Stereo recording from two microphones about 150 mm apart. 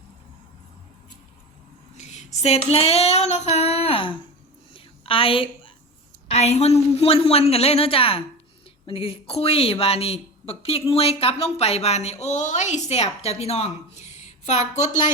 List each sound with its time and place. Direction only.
2.0 s female singing: 50° left (ahead or behind)
4.7 s a sound: 35° left (ahead or behind)
6.3 s a woman's voice: 45° left (ahead or behind)